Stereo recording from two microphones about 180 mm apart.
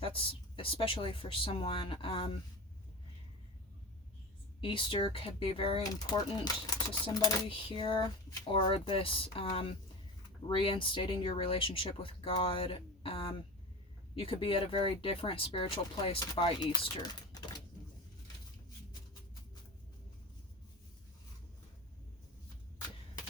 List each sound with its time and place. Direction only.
0.0 s speech: 30° left (ahead or behind)
4.6 s speech: 30° left (ahead or behind)